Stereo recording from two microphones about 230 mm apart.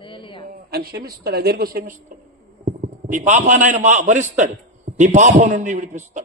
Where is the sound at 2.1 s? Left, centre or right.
Right.